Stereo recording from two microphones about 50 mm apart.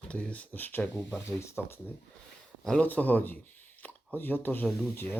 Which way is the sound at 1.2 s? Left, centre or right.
Left.